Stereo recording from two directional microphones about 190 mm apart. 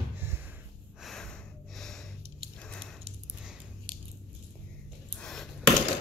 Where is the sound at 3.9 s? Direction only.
25° right (ahead or behind).